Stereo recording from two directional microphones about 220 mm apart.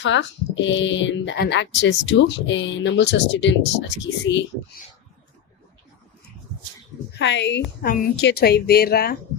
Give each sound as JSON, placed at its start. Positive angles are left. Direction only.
{"t": 0.0, "sound": "speech", "side_deg": 55}
{"t": 7.2, "sound": "a woman's voice", "side_deg": 55}
{"t": 7.8, "sound": "a woman's voice", "side_deg": 40}